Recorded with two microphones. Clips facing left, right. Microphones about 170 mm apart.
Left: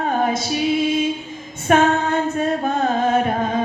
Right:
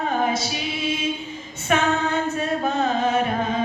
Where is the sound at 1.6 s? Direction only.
50° left (ahead or behind).